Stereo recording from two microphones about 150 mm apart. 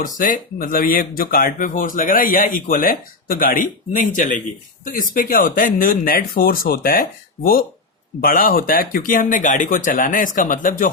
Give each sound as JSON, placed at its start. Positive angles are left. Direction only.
{"t": 0.0, "sound": "speech", "side_deg": 60}